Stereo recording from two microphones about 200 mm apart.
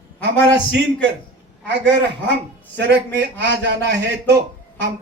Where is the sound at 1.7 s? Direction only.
60° right (ahead or behind).